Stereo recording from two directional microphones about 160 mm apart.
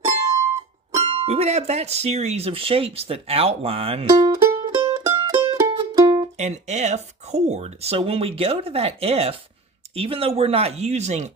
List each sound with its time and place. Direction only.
0.9 s speech: 40° right (ahead or behind)
5.1 s music: 35° right (ahead or behind)
5.5 s music: 20° right (ahead or behind)
6.3 s speech: 45° right (ahead or behind)